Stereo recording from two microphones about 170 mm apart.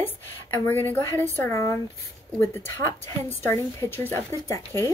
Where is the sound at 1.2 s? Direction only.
15° left (ahead or behind).